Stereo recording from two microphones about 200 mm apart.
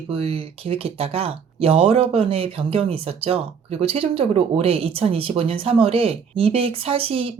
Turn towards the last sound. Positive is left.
turn(degrees=-30)  # may be behind; listen again after turning